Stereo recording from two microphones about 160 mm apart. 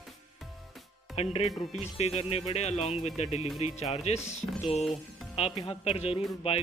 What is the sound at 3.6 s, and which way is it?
Music, 40° left (ahead or behind).